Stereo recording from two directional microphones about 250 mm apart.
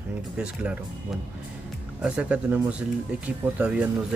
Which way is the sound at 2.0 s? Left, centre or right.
Centre.